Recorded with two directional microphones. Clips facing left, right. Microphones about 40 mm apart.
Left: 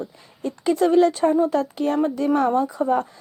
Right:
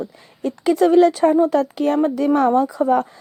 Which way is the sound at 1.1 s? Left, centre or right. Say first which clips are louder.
Right 4 dB; right.